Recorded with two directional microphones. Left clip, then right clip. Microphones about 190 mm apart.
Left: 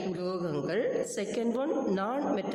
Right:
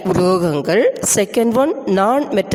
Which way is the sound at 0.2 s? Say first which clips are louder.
Right 19 dB; 45° right (ahead or behind).